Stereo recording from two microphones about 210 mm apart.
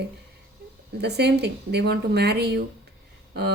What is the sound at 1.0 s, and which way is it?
Speech, 50° right (ahead or behind).